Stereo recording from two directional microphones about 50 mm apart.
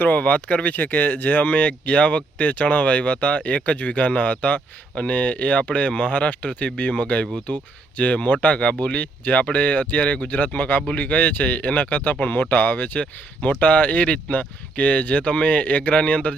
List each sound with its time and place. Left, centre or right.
0.0 s speech: left